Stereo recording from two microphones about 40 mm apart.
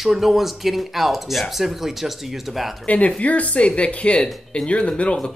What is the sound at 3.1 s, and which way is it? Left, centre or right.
Speech, left.